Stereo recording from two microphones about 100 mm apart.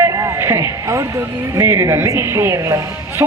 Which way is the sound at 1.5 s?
30° right (ahead or behind).